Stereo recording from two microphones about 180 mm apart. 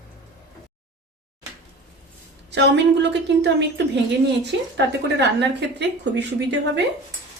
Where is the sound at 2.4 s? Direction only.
70° right (ahead or behind).